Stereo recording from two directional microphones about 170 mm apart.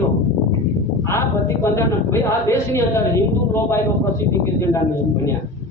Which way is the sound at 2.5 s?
15° left (ahead or behind).